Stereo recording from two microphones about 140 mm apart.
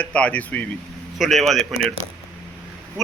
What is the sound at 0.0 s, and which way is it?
Speech, 10° left (ahead or behind).